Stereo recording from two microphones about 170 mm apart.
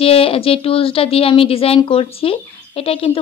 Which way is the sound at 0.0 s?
35° left (ahead or behind).